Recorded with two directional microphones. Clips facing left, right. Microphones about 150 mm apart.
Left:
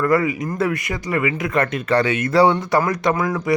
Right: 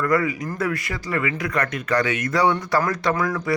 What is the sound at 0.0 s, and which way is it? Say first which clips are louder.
Speech: left 3 dB; 25° left (ahead or behind).